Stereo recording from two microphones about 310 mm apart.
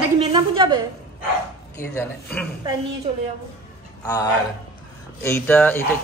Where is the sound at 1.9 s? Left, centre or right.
Centre.